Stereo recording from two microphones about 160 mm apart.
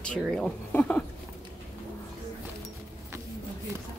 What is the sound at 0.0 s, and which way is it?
A woman's voice, 5° left (ahead or behind).